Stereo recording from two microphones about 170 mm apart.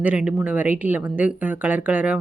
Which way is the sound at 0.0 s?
5° right (ahead or behind).